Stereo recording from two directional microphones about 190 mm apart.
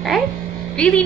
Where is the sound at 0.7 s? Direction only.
5° left (ahead or behind).